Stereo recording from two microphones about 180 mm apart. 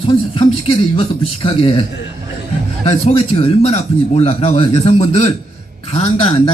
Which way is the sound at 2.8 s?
35° left (ahead or behind).